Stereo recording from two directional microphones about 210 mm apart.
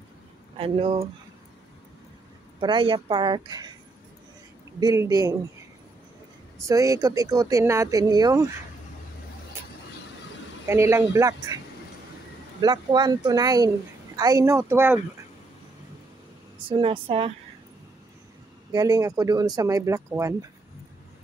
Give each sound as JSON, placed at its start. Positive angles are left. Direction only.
{"t": 0.6, "sound": "speech", "side_deg": -25}
{"t": 2.6, "sound": "speech", "side_deg": -25}
{"t": 4.7, "sound": "speech", "side_deg": -15}
{"t": 6.7, "sound": "speech", "side_deg": -15}
{"t": 10.7, "sound": "speech", "side_deg": -10}
{"t": 16.6, "sound": "speech", "side_deg": -25}
{"t": 18.7, "sound": "speech", "side_deg": -15}